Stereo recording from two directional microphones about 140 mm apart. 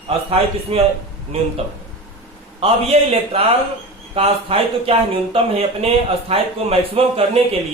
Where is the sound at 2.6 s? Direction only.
45° right (ahead or behind).